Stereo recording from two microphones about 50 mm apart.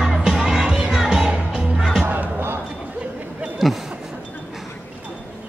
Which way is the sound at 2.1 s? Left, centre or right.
Right.